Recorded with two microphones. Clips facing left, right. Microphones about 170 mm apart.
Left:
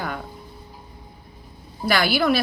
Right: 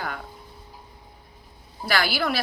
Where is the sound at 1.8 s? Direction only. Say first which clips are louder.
Left 5 dB; 20° left (ahead or behind).